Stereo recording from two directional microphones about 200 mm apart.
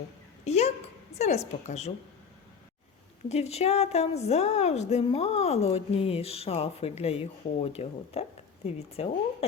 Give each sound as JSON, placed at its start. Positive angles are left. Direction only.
{"t": 0.4, "sound": "a sound", "side_deg": 35}
{"t": 1.2, "sound": "a woman's voice", "side_deg": 35}
{"t": 3.2, "sound": "a woman's voice", "side_deg": 30}